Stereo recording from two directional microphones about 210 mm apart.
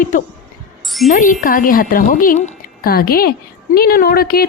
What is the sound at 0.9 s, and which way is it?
Speech, centre (ahead or behind).